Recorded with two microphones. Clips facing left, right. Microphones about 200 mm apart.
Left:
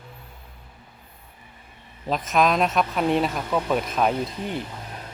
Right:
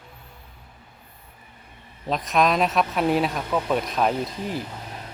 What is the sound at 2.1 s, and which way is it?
Speech, centre (ahead or behind).